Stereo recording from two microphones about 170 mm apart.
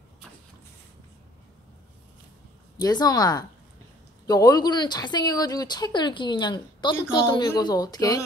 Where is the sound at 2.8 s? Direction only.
25° left (ahead or behind).